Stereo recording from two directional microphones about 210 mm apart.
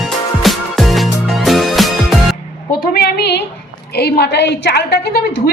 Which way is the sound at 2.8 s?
50° left (ahead or behind).